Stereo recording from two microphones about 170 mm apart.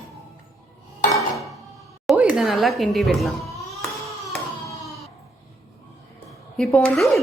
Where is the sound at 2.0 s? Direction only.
5° right (ahead or behind).